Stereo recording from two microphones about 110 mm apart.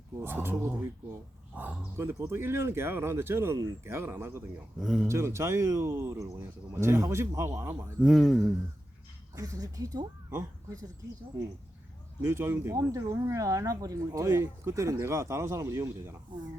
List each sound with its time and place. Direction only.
0.2 s speech: 20° right (ahead or behind)
1.5 s a sound: 10° right (ahead or behind)
2.0 s speech: 25° right (ahead or behind)
4.8 s speech: 5° right (ahead or behind)
5.0 s speech: 25° right (ahead or behind)
8.0 s speech: centre (ahead or behind)
9.3 s speech: 30° right (ahead or behind)
12.2 s speech: 25° right (ahead or behind)